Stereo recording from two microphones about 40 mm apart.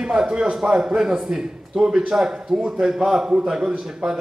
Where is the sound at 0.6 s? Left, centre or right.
Centre.